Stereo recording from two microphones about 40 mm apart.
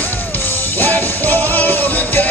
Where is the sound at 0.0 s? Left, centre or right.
Left.